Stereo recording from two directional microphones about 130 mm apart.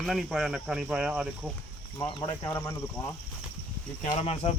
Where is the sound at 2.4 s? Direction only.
20° left (ahead or behind).